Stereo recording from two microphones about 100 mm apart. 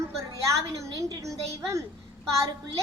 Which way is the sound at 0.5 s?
30° right (ahead or behind).